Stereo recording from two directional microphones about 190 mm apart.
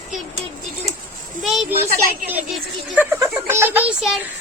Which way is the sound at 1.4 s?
Centre (ahead or behind).